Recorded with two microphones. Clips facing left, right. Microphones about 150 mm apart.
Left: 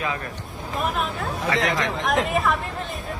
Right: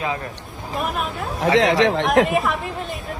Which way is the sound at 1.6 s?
90° right.